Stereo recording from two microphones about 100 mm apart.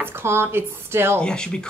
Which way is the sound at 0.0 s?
25° right (ahead or behind).